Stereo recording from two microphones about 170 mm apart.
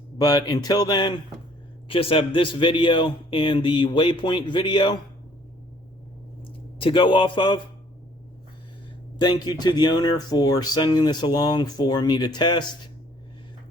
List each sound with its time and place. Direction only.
0.2 s speech: 20° left (ahead or behind)
6.7 s speech: 30° left (ahead or behind)
9.1 s speech: 25° left (ahead or behind)